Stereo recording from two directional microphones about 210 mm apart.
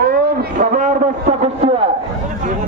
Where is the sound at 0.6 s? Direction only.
35° right (ahead or behind).